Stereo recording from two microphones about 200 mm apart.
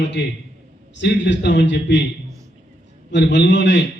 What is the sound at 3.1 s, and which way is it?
Speech, 60° left (ahead or behind).